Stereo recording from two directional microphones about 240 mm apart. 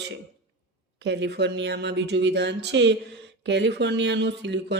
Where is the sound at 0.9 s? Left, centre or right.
Right.